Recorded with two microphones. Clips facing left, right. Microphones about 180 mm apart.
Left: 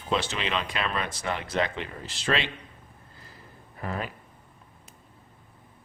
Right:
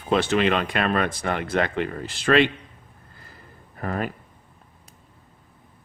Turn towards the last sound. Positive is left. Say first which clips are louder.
# right 5 dB
turn(degrees=-50)  # may be behind; listen again after turning